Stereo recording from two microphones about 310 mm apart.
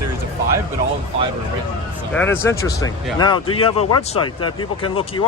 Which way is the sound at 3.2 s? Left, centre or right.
Centre.